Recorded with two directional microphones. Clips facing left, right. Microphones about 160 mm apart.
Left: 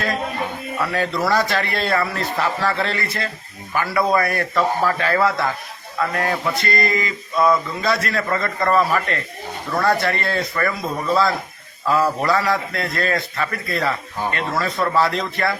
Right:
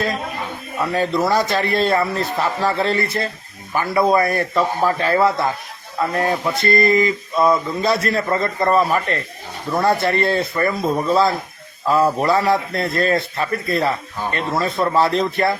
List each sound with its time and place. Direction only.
0.8 s a man's voice: 20° right (ahead or behind)